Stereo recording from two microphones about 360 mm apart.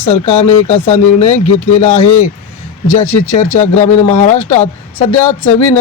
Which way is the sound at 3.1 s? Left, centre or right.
Centre.